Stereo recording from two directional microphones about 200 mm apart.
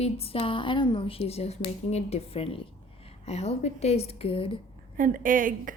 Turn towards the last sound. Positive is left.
turn(degrees=-45)  # may be behind; listen again after turning